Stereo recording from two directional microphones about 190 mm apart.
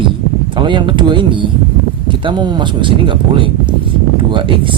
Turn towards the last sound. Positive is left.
turn(degrees=-25)  # may be behind; listen again after turning